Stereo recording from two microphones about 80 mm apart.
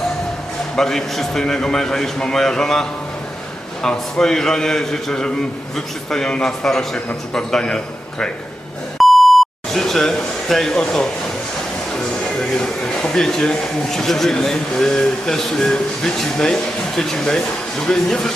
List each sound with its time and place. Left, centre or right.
0.8 s a man's voice: centre
3.8 s a man's voice: centre
9.0 s beep: centre
11.9 s a man's voice: centre